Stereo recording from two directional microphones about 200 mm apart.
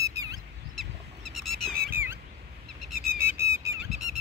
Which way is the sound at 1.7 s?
50° right (ahead or behind).